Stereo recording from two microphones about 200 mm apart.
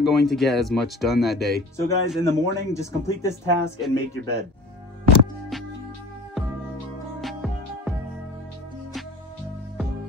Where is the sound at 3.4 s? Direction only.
60° right (ahead or behind).